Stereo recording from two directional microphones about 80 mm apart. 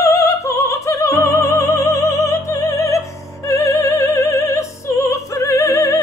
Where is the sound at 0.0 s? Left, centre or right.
Left.